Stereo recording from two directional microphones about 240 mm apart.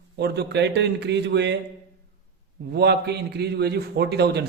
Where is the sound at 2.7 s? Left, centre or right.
Right.